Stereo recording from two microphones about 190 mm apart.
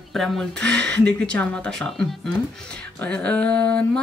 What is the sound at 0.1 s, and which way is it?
Speech, centre (ahead or behind).